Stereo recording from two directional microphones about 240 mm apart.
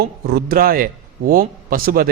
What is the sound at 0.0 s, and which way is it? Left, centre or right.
A man's voice, right.